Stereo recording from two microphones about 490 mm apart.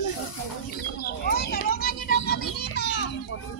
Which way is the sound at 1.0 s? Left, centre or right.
Centre.